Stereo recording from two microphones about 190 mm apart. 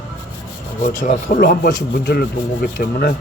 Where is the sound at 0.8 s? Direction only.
40° left (ahead or behind).